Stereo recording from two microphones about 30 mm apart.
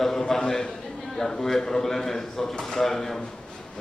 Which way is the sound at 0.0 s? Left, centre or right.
Centre.